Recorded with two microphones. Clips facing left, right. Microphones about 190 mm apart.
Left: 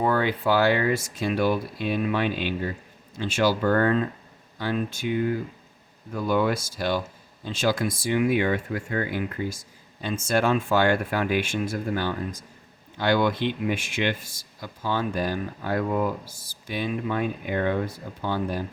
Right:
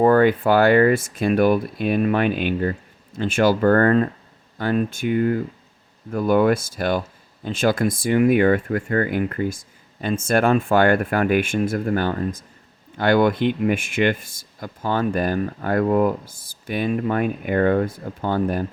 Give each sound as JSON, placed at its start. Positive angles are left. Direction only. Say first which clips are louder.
{"t": 0.0, "sound": "speech", "louder": "right 8 dB", "side_deg": -50}